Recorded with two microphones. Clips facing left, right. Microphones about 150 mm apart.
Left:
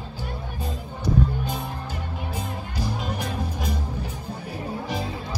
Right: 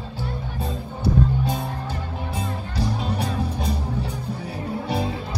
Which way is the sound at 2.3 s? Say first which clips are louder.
Right 5 dB; 30° right (ahead or behind).